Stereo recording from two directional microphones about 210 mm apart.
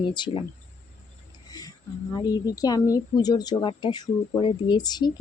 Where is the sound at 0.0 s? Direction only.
20° left (ahead or behind).